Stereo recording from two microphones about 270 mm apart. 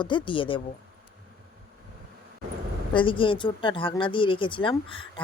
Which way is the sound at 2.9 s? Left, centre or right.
Centre.